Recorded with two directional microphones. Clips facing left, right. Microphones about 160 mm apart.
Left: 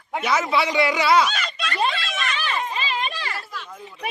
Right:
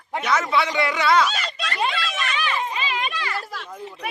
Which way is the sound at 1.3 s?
35° right (ahead or behind).